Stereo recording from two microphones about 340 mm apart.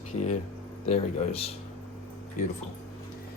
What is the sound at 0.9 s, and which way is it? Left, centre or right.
Speech, centre.